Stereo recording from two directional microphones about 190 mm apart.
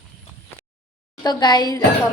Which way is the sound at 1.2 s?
20° left (ahead or behind).